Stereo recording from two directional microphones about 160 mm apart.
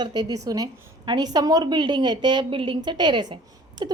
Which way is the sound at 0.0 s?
25° right (ahead or behind).